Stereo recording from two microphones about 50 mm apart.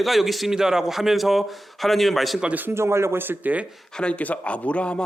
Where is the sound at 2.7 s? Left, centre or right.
Right.